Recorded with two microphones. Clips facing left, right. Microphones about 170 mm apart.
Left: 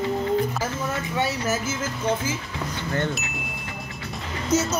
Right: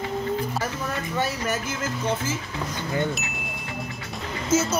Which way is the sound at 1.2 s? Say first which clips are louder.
Left 2 dB; 5° left (ahead or behind).